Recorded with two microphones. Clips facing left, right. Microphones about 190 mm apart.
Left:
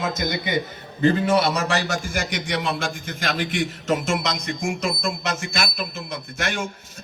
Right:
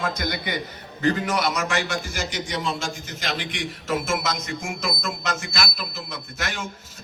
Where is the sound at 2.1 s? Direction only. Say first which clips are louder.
Left 3 dB; 65° left (ahead or behind); by 3.6 s 50° left (ahead or behind).